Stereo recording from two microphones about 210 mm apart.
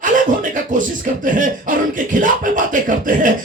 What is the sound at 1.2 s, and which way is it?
Music, 40° right (ahead or behind).